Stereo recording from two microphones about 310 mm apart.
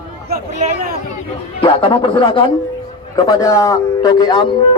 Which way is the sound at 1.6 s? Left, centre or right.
Centre.